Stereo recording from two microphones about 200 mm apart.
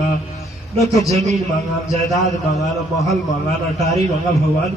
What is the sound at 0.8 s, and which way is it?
Speech, 15° left (ahead or behind).